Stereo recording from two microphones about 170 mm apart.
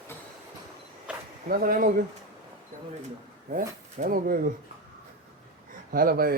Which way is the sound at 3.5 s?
50° right (ahead or behind).